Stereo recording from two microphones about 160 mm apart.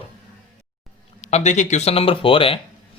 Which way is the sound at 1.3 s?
45° left (ahead or behind).